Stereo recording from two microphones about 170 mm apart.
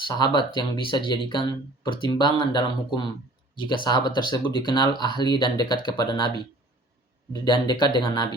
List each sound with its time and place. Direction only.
0.1 s speech: 25° left (ahead or behind)
7.3 s speech: 25° left (ahead or behind)